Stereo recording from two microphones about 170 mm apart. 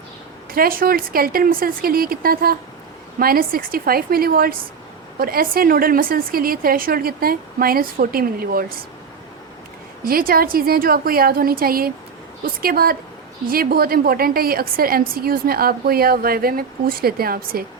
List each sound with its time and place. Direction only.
0.5 s a woman's voice: 55° right (ahead or behind)
10.0 s a woman's voice: 60° right (ahead or behind)